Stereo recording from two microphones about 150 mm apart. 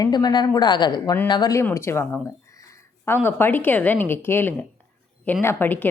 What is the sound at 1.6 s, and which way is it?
A woman's voice, 15° left (ahead or behind).